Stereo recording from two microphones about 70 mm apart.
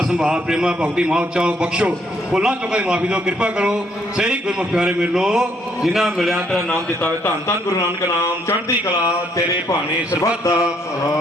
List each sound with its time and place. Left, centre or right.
0.2 s a man's voice: centre
10.2 s a man's voice: left